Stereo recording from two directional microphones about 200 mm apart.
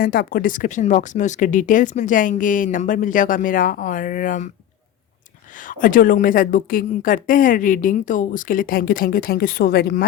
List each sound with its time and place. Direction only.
0.0 s speech: 45° left (ahead or behind)
5.6 s a woman's voice: 40° left (ahead or behind)